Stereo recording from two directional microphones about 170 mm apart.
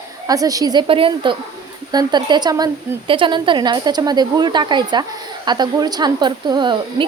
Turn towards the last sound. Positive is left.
turn(degrees=-25)  # may be behind; listen again after turning